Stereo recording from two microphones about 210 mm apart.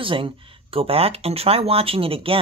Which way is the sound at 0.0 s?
25° right (ahead or behind).